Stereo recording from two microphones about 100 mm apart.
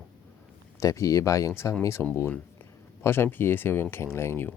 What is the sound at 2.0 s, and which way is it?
Speech, 20° left (ahead or behind).